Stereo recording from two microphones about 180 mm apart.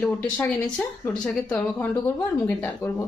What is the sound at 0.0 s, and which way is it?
Speech, 10° left (ahead or behind).